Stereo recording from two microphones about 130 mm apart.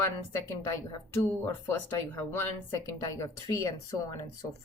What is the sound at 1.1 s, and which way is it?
Speech, 15° left (ahead or behind).